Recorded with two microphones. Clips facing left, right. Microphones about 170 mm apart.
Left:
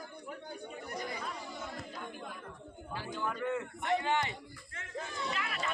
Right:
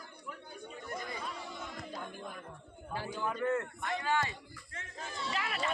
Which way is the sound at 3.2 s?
5° right (ahead or behind).